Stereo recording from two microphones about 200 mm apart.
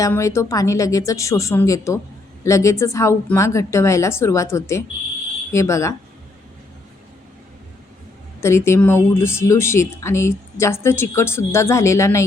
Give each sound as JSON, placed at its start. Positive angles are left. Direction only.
{"t": 0.0, "sound": "speech", "side_deg": 15}
{"t": 8.4, "sound": "speech", "side_deg": 15}